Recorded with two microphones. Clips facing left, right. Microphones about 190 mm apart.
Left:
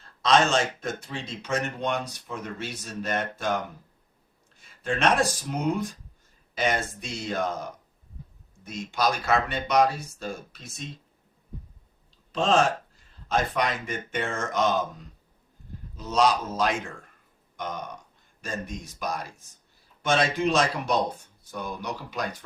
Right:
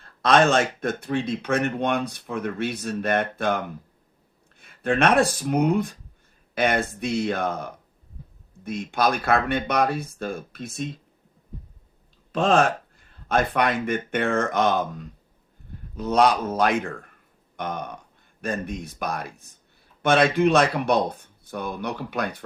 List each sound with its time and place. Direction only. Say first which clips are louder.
0.0 s speech: right 3 dB; 55° right (ahead or behind)
12.3 s speech: right 3 dB; 55° right (ahead or behind)